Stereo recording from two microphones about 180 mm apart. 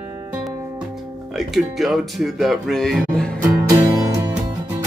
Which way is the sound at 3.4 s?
10° right (ahead or behind).